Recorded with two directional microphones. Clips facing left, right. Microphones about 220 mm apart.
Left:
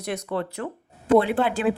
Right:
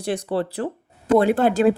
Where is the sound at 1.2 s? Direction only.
45° right (ahead or behind).